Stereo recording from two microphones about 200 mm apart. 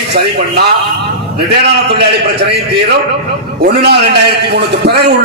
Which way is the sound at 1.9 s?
55° right (ahead or behind).